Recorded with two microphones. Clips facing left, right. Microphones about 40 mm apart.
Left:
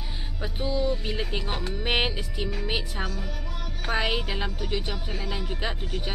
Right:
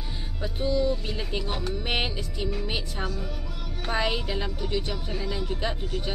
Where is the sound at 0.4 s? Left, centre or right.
Centre.